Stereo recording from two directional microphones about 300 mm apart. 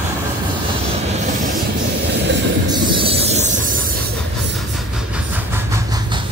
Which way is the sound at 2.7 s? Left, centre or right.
Centre.